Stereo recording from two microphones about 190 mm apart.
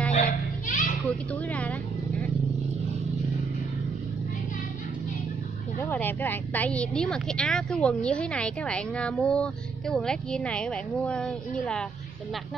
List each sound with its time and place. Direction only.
0.1 s a sound: 45° left (ahead or behind)
1.0 s speech: 5° left (ahead or behind)
5.8 s speech: 10° left (ahead or behind)